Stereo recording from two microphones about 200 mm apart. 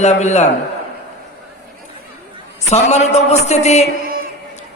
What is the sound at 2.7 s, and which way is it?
A man's voice, 35° left (ahead or behind).